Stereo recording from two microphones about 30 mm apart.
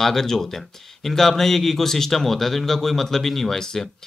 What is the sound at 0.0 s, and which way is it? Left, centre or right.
Speech, centre.